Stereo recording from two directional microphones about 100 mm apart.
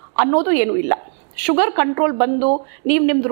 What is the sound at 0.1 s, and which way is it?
A woman's voice, 25° right (ahead or behind).